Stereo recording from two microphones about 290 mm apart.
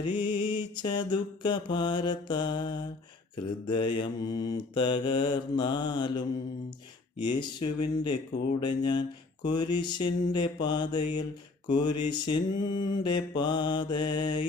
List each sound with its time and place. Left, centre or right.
0.0 s mantra: centre
8.6 s mantra: centre